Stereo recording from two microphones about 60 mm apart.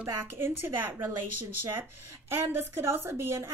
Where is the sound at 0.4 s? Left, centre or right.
Right.